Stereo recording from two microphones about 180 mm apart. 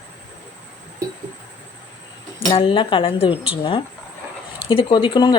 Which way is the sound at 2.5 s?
30° left (ahead or behind).